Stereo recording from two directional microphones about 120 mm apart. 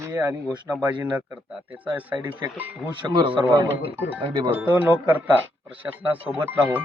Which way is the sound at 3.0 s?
40° right (ahead or behind).